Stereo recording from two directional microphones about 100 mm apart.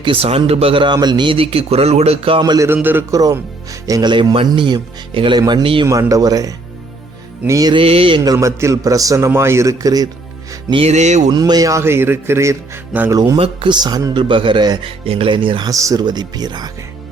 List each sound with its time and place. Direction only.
0.0 s speech: 65° right (ahead or behind)
0.9 s speech: 45° right (ahead or behind); by 2.4 s 80° right
2.4 s speech: 40° right (ahead or behind)
2.6 s speech: 20° right (ahead or behind)
3.1 s a man's voice: 35° right (ahead or behind)
4.0 s speech: 50° right (ahead or behind)
5.4 s a man's voice: 40° right (ahead or behind)
7.7 s speech: 65° right (ahead or behind)
8.2 s a man's voice: 35° right (ahead or behind)
10.7 s speech: 65° right (ahead or behind)
11.3 s speech: 40° right (ahead or behind)
13.1 s a man's voice: 40° right (ahead or behind)
15.0 s speech: 70° right (ahead or behind)
15.6 s speech: 35° right (ahead or behind)